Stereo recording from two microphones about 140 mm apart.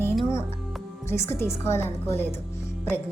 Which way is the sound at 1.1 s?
20° left (ahead or behind).